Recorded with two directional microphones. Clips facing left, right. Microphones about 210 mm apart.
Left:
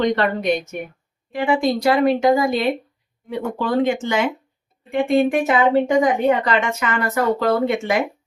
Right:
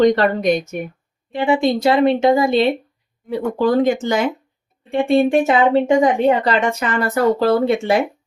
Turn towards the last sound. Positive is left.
turn(degrees=-30)  # may be behind; listen again after turning